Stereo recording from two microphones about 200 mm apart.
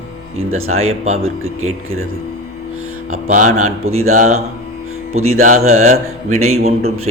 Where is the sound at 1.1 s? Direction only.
90° right.